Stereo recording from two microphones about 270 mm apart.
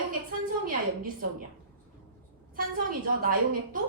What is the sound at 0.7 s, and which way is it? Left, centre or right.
Speech, right.